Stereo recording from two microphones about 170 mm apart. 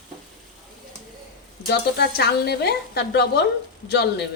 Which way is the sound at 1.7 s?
70° left (ahead or behind).